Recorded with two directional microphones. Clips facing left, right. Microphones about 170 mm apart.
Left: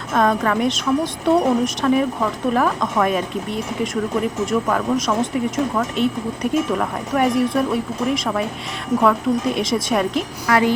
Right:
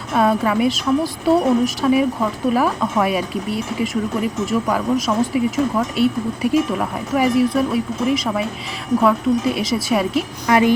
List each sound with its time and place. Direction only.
0.1 s a woman's voice: 10° right (ahead or behind)
4.6 s speech: centre (ahead or behind)
10.5 s a woman's voice: 20° right (ahead or behind)